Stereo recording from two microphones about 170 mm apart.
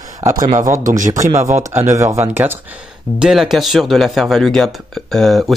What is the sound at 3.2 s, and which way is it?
Speech, 5° right (ahead or behind).